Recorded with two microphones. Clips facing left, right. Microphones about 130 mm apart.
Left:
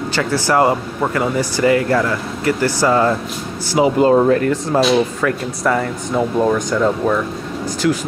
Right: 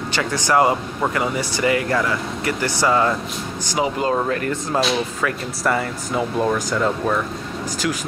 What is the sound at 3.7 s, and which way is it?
Speech, 25° left (ahead or behind).